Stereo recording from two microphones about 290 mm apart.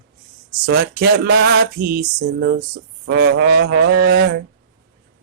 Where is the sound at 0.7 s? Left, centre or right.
Right.